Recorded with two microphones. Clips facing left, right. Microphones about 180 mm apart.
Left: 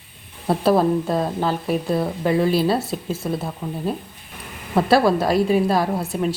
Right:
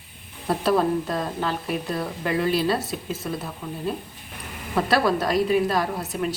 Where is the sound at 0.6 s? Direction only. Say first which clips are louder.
Left 4 dB; 30° left (ahead or behind).